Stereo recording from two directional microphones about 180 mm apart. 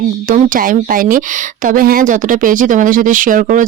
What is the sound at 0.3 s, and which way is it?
Speech, 50° right (ahead or behind).